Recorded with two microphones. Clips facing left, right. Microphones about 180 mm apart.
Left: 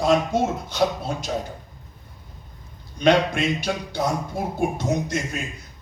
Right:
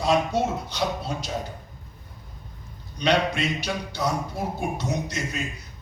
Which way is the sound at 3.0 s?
50° left (ahead or behind).